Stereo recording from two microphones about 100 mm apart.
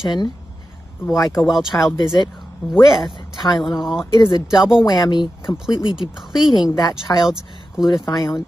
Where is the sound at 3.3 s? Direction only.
45° left (ahead or behind).